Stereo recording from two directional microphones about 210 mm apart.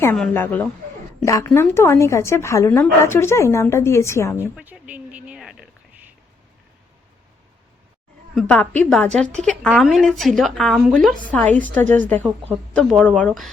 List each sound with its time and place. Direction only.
0.0 s speech: 10° left (ahead or behind)
4.4 s a sound: 10° right (ahead or behind)
8.4 s a woman's voice: 5° left (ahead or behind)